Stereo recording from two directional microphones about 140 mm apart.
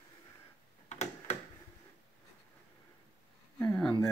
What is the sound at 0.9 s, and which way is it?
Tick-tock, 55° left (ahead or behind).